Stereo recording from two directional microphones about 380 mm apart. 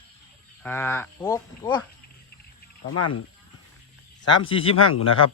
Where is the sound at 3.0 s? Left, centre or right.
Left.